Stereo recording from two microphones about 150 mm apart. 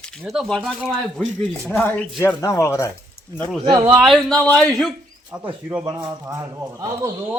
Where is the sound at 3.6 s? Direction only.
20° right (ahead or behind).